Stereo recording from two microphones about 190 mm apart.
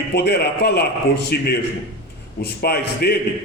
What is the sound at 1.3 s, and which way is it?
A man's voice, 55° left (ahead or behind).